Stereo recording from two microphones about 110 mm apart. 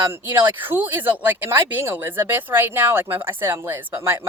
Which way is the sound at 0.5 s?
15° right (ahead or behind).